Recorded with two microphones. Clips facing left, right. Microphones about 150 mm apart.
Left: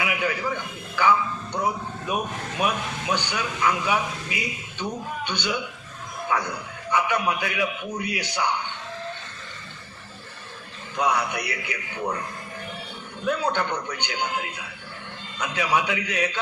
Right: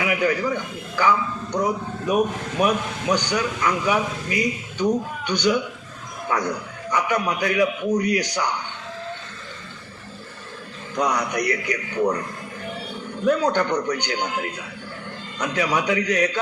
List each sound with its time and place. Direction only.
0.0 s a man's voice: 40° right (ahead or behind)
10.9 s a man's voice: 40° right (ahead or behind)
13.2 s a man's voice: 40° right (ahead or behind)